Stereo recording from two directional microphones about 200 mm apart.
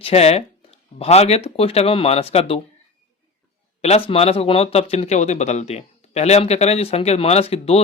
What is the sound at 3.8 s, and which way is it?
Speech, 30° left (ahead or behind).